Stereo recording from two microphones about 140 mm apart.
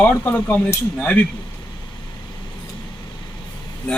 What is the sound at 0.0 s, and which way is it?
A man's voice, 10° left (ahead or behind).